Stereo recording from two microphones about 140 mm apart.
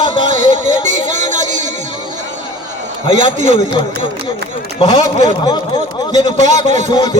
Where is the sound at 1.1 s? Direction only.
60° right (ahead or behind).